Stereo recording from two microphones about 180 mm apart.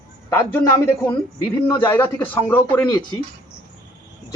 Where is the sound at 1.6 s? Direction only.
25° left (ahead or behind).